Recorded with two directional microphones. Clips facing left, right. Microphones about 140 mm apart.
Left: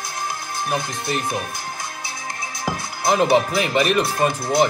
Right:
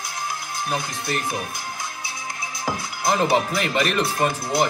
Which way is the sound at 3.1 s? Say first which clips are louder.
Left 3 dB; 20° left (ahead or behind).